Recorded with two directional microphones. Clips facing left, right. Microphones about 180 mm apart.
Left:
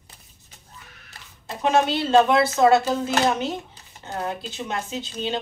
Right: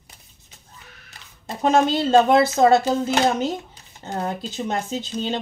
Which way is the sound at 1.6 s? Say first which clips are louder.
Right 2 dB; 40° right (ahead or behind).